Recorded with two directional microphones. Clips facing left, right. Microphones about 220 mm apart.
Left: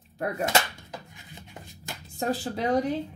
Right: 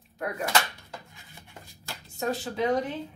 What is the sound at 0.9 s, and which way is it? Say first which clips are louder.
Rub: left 3 dB; 20° left (ahead or behind).